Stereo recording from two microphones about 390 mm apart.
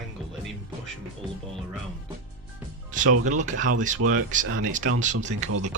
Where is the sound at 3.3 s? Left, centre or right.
Centre.